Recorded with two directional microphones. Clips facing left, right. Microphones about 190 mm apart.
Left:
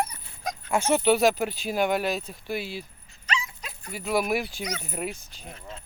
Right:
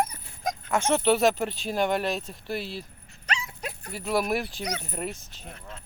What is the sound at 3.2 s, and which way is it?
Dog, 65° right (ahead or behind).